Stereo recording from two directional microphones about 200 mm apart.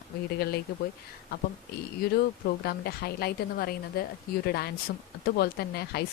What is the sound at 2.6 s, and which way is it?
Speech, 50° left (ahead or behind).